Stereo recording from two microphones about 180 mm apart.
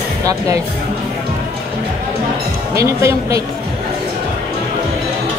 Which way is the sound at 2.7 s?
15° right (ahead or behind).